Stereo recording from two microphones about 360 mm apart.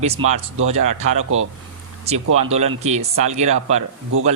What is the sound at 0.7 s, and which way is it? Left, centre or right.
Speech, centre.